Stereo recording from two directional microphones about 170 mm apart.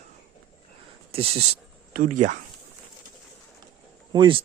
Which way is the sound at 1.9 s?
50° right (ahead or behind).